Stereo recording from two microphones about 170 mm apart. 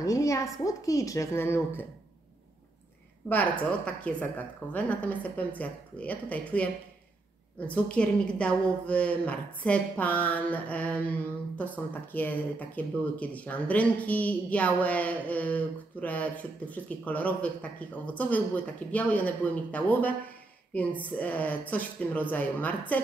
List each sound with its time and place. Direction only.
0.0 s a woman's voice: 20° left (ahead or behind)
3.3 s a woman's voice: 10° left (ahead or behind)